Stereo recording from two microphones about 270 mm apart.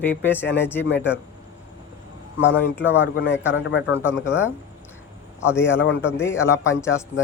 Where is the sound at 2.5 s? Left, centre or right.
Centre.